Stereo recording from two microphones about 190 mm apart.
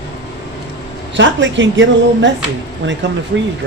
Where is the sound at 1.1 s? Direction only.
75° right (ahead or behind).